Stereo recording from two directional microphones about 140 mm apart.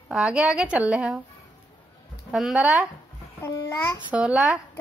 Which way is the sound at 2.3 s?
5° right (ahead or behind).